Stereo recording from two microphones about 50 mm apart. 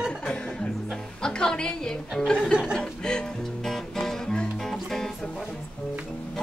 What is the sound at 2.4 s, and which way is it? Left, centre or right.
Music, centre.